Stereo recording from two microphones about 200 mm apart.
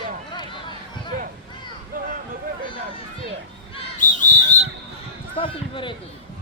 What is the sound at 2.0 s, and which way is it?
Vehicle, 45° right (ahead or behind).